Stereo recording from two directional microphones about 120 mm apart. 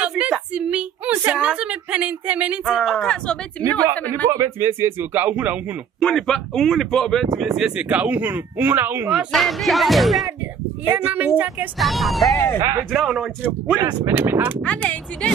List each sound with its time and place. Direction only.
0.0 s a sound: 10° right (ahead or behind)
2.7 s speech: centre (ahead or behind)
4.3 s speech: 25° right (ahead or behind)
5.9 s speech: 5° left (ahead or behind); by 9.3 s 15° right (ahead or behind)
9.3 s speech: centre (ahead or behind)
10.9 s speech: 15° right (ahead or behind)
11.8 s speech: centre (ahead or behind)
13.4 s speech: 15° right (ahead or behind)
14.6 s speech: 10° left (ahead or behind)